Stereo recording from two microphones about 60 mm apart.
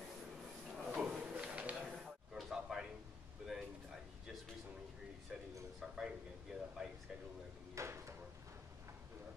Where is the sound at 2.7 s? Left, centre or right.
Centre.